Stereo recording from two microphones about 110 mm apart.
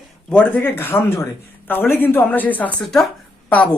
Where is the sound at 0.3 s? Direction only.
15° left (ahead or behind).